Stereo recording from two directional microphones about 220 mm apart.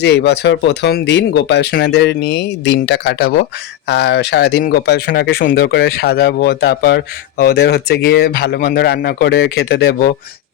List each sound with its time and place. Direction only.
0.0 s speech: 50° left (ahead or behind)